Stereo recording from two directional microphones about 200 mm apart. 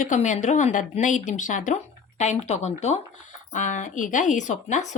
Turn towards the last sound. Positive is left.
turn(degrees=35)  # may be behind; listen again after turning